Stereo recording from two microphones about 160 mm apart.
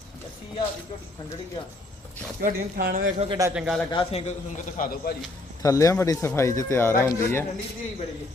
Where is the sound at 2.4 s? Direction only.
60° right (ahead or behind).